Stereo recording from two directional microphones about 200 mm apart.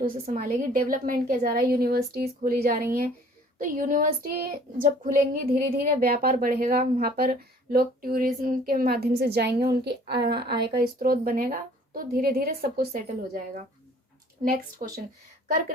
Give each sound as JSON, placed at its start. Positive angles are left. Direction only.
{"t": 0.0, "sound": "speech", "side_deg": -45}
{"t": 14.4, "sound": "speech", "side_deg": -45}